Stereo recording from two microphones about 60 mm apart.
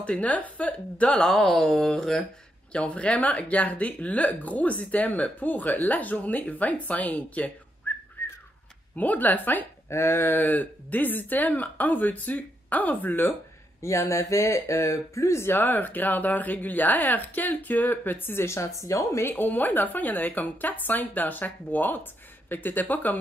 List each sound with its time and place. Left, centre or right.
0.0 s speech: left
1.2 s speech: centre
2.7 s speech: left
7.9 s whistling: left
8.9 s speech: left
9.8 s a sound: left
10.4 s speech: left
13.7 s speech: left
19.2 s speech: left